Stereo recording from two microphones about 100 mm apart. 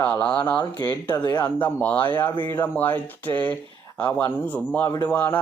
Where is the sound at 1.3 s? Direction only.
20° left (ahead or behind).